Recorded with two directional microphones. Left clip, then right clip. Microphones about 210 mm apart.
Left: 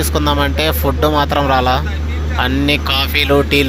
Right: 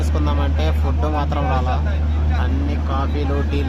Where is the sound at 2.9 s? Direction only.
20° left (ahead or behind).